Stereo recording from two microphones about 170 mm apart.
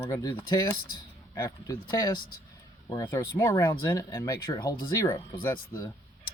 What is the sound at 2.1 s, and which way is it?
Speech, 60° left (ahead or behind).